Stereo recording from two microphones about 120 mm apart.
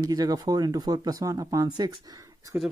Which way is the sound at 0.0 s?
30° right (ahead or behind).